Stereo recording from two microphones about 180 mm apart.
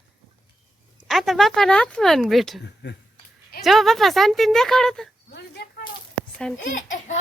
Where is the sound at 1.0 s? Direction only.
Centre (ahead or behind).